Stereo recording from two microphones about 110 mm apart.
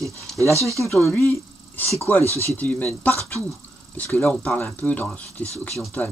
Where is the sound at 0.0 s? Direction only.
25° right (ahead or behind).